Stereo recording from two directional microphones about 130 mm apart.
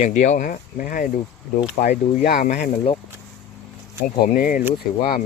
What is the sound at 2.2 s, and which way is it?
Speech, 90° left.